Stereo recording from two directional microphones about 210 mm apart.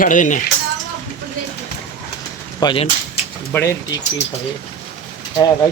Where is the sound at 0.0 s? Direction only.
40° left (ahead or behind).